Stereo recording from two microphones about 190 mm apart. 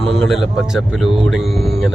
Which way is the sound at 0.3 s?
Centre (ahead or behind).